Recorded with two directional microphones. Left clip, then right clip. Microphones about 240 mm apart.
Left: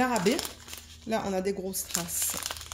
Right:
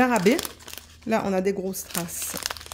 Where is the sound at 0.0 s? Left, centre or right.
Right.